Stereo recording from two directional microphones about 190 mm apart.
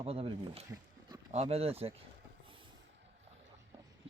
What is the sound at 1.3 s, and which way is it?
Speech, 35° right (ahead or behind).